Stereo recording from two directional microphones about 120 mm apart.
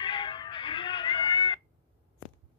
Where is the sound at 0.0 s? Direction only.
40° left (ahead or behind).